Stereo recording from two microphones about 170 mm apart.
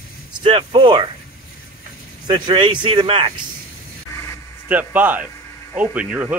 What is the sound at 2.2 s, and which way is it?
Speech, 25° right (ahead or behind).